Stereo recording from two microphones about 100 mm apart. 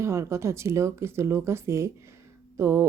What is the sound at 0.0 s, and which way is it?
Speech, 30° right (ahead or behind).